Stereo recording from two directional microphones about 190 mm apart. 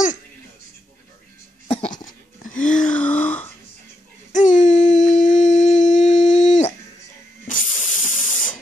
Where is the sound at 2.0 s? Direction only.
45° left (ahead or behind).